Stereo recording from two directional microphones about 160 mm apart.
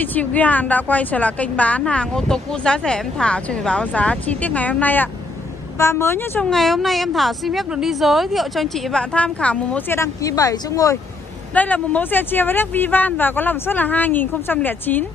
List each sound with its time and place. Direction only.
0.0 s a woman's voice: 10° left (ahead or behind)
6.5 s a woman's voice: centre (ahead or behind); by 11.0 s 20° left (ahead or behind)
11.5 s a woman's voice: 10° left (ahead or behind)